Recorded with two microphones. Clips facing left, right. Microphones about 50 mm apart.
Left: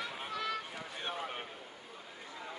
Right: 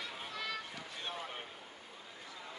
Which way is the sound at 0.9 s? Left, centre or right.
Left.